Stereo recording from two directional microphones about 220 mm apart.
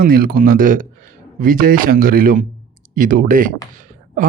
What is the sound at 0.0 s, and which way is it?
Speech, 40° right (ahead or behind).